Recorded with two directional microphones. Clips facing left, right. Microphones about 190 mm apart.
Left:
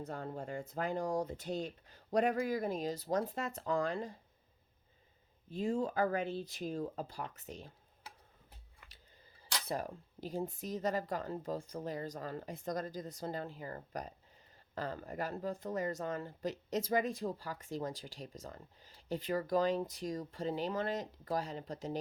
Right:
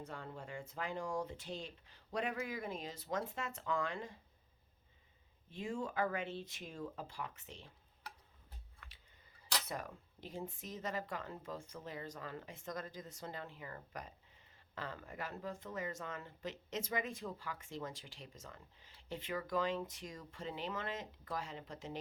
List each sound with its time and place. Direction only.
0.0 s speech: 40° left (ahead or behind)
5.5 s speech: 35° left (ahead or behind)
9.6 s speech: 35° left (ahead or behind)